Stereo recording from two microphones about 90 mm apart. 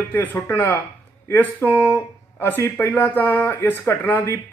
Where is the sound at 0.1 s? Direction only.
20° left (ahead or behind).